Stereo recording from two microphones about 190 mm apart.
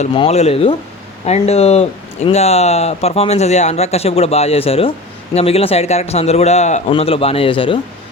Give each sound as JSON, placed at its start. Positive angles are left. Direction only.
{"t": 0.0, "sound": "speech", "side_deg": 30}